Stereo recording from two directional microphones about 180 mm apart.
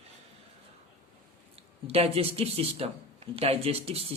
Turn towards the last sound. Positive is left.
turn(degrees=-30)  # may be behind; listen again after turning